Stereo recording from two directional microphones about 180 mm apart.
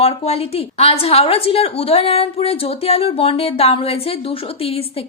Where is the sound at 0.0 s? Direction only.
35° left (ahead or behind).